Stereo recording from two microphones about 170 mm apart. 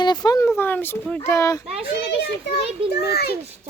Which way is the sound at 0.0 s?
25° left (ahead or behind).